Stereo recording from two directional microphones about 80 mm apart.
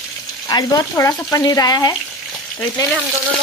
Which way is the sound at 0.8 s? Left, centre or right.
Left.